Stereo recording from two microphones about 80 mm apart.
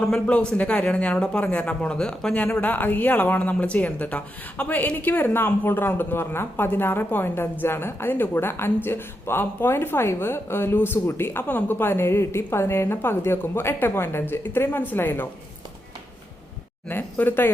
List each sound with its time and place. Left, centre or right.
0.1 s speech: centre
16.9 s speech: left